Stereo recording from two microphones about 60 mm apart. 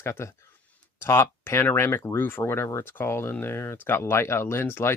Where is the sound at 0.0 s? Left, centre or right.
Left.